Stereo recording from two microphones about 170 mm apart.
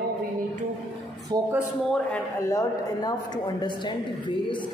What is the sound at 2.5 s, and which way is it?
Speech, 20° left (ahead or behind).